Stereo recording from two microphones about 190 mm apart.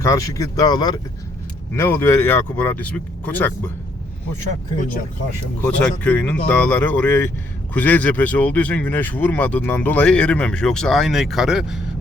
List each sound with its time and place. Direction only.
0.0 s speech: 15° left (ahead or behind)
5.6 s speech: 5° left (ahead or behind)